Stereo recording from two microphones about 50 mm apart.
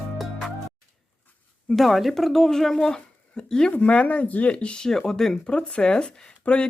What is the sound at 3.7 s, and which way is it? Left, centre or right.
Speech, left.